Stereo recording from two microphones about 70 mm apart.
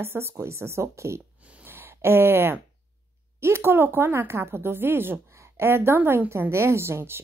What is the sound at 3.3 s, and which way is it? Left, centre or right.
Speech, right.